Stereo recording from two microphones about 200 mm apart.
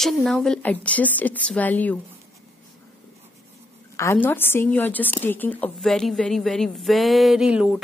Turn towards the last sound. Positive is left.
turn(degrees=-5)  # may be behind; listen again after turning